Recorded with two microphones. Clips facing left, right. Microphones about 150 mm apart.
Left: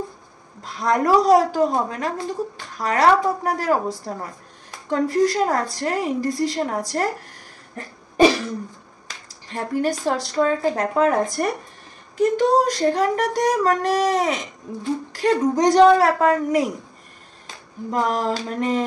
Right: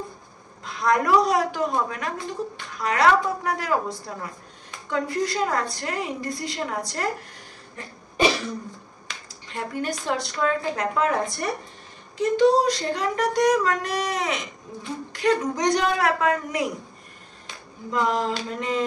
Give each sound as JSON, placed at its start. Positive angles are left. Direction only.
{"t": 0.7, "sound": "a woman's voice", "side_deg": 35}
{"t": 9.0, "sound": "a woman's voice", "side_deg": 40}
{"t": 17.9, "sound": "a sound", "side_deg": 40}